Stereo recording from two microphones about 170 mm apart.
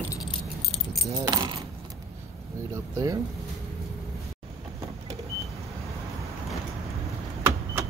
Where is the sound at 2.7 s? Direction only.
20° right (ahead or behind).